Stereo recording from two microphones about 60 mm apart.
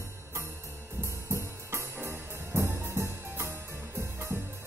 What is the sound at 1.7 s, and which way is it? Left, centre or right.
Music, right.